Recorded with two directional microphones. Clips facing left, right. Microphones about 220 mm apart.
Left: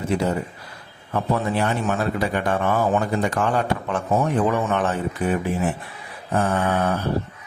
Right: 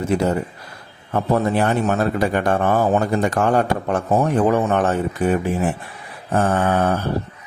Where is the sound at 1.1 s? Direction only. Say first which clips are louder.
Right 4 dB; 50° right (ahead or behind).